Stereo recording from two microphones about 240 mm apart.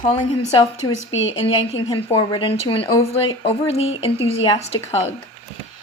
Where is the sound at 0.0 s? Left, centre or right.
Left.